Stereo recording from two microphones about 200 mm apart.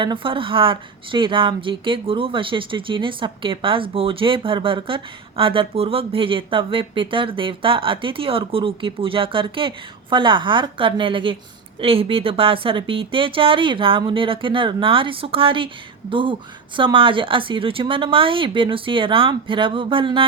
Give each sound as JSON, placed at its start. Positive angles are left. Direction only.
{"t": 0.0, "sound": "speech", "side_deg": -25}